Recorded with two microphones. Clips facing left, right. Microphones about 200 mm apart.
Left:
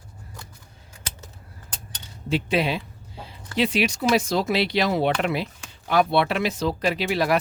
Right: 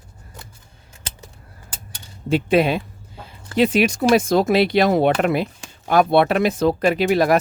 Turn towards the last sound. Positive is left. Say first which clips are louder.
# right 6 dB
turn(degrees=-50)  # may be behind; listen again after turning